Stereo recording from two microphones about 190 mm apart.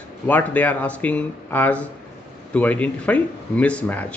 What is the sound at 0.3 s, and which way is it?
Speech, 10° left (ahead or behind).